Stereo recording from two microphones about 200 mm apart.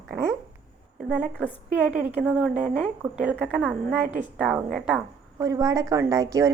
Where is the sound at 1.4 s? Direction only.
5° right (ahead or behind).